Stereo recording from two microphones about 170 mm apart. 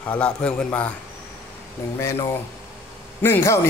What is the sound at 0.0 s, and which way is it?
Speech, 5° left (ahead or behind).